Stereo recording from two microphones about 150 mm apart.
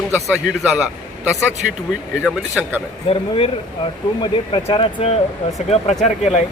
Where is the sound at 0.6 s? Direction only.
10° right (ahead or behind).